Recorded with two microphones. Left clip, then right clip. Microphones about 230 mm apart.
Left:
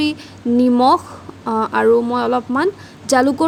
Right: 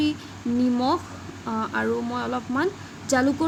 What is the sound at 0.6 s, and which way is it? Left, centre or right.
A woman's voice, left.